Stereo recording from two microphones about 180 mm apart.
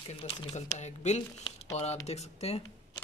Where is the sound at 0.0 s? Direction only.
30° left (ahead or behind).